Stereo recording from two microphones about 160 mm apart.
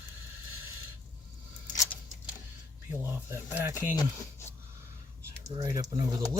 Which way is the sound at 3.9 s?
20° left (ahead or behind).